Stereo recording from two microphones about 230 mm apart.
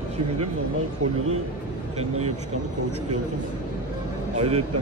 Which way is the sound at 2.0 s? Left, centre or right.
Right.